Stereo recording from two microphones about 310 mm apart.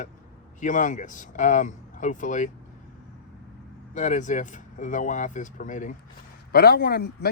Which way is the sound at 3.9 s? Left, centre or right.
Left.